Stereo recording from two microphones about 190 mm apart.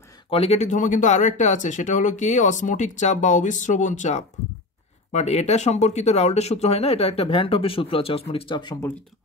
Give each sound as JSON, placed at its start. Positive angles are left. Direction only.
{"t": 0.3, "sound": "speech", "side_deg": 30}